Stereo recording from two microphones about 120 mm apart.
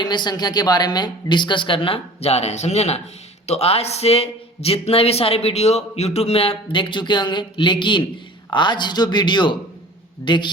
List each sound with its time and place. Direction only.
0.0 s a woman's voice: 40° left (ahead or behind)